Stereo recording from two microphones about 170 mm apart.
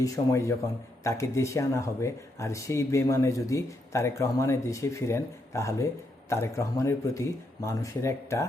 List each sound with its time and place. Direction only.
0.0 s speech: 20° left (ahead or behind)